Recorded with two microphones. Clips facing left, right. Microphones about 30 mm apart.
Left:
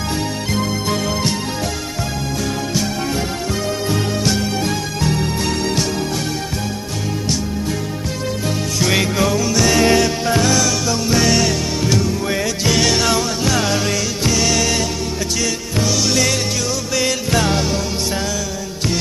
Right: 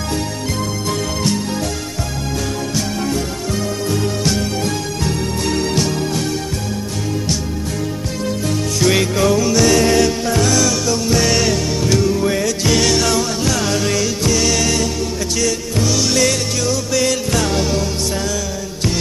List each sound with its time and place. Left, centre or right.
0.5 s music: centre
8.8 s music: centre
9.7 s music: centre